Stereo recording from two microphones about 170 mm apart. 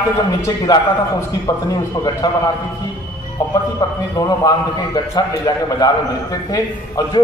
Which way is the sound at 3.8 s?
20° left (ahead or behind).